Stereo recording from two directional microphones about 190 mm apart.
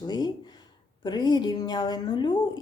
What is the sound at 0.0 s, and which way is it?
Speech, 20° left (ahead or behind).